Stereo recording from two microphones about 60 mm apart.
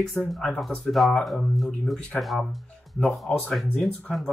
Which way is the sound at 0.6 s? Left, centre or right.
Centre.